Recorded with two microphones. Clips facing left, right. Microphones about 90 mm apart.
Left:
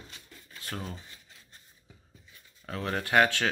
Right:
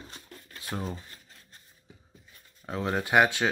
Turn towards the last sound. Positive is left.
turn(degrees=-15)  # may be behind; listen again after turning